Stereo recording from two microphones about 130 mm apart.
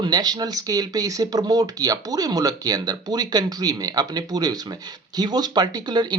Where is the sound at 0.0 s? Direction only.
30° right (ahead or behind).